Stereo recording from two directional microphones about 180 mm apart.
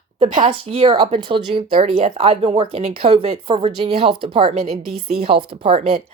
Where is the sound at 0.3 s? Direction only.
50° right (ahead or behind).